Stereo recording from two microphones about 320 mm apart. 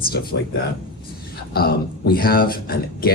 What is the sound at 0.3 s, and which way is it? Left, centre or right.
Speech, left.